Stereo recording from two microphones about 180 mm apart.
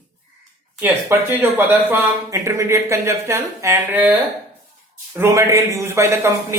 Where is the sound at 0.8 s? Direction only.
10° right (ahead or behind).